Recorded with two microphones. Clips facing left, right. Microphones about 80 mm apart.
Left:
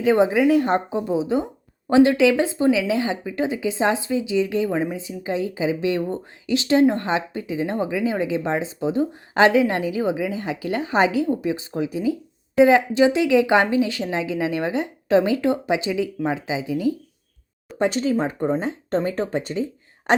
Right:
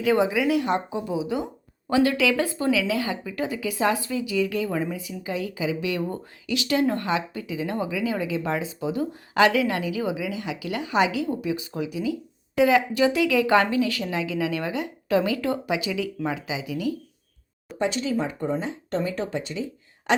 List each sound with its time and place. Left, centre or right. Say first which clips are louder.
0.0 s a woman's voice: left 4 dB; left
17.7 s speech: left 4 dB; left